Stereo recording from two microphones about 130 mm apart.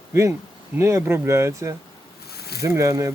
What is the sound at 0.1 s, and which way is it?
Speech, 25° right (ahead or behind).